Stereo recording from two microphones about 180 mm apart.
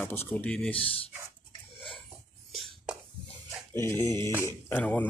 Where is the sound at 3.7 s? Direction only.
15° left (ahead or behind).